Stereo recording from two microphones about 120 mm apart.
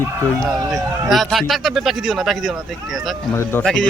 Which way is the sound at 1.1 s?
Centre (ahead or behind).